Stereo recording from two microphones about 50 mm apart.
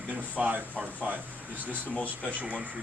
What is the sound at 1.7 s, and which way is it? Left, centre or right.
Speech, left.